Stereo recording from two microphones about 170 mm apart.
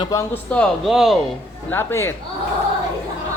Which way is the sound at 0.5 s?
10° left (ahead or behind).